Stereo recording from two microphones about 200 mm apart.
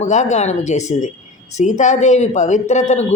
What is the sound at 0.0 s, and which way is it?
A man's voice, 35° left (ahead or behind).